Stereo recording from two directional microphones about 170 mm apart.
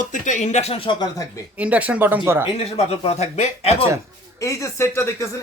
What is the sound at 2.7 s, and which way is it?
Speech, 35° left (ahead or behind).